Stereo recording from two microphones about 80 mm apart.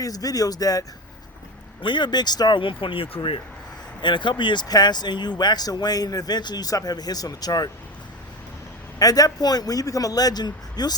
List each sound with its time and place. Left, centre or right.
0.0 s a man's voice: left
1.8 s speech: left
4.0 s speech: left
4.7 s speech: left
9.0 s a man's voice: left